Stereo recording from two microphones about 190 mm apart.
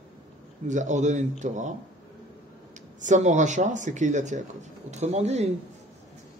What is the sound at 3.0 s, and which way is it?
A man's voice, 40° right (ahead or behind).